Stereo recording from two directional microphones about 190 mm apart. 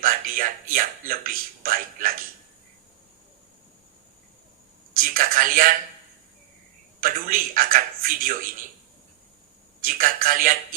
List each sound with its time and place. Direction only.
0.0 s a man's voice: 50° right (ahead or behind)
4.9 s a man's voice: 50° right (ahead or behind)
7.0 s a man's voice: 50° right (ahead or behind)
9.8 s a man's voice: 45° right (ahead or behind)